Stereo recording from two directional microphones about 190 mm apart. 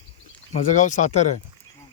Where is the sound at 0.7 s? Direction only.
40° left (ahead or behind).